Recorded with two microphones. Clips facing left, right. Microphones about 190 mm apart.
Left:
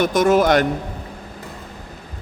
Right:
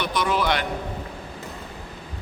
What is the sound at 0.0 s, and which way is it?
Speech, 45° left (ahead or behind).